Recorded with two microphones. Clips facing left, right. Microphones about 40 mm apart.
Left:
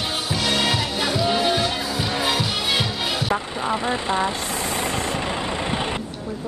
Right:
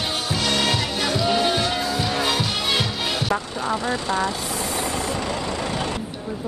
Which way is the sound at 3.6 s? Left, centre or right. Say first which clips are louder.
Left 1 dB; left.